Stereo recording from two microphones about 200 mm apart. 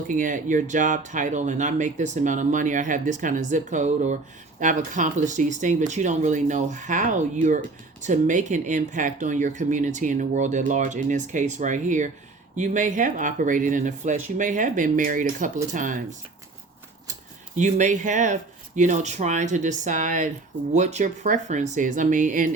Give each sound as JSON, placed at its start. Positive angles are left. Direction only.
{"t": 0.1, "sound": "speech", "side_deg": -40}
{"t": 17.6, "sound": "speech", "side_deg": -35}